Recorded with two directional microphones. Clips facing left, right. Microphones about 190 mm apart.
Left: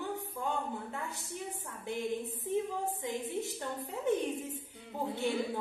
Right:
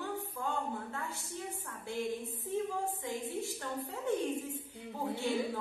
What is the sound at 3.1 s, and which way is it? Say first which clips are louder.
A woman's voice: left 2 dB; 20° left (ahead or behind).